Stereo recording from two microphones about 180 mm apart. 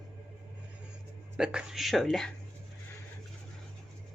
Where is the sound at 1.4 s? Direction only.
5° right (ahead or behind).